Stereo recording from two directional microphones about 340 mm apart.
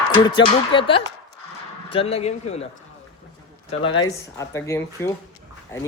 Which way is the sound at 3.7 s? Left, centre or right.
Centre.